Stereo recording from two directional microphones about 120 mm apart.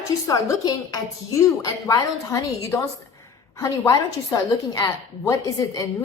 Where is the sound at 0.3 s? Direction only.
30° left (ahead or behind).